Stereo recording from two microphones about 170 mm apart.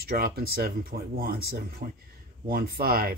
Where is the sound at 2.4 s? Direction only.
60° right (ahead or behind).